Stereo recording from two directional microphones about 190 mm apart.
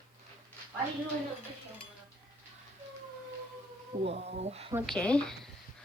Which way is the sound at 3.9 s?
35° right (ahead or behind).